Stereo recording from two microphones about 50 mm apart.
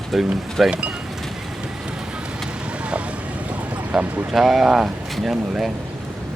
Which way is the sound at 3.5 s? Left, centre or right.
Right.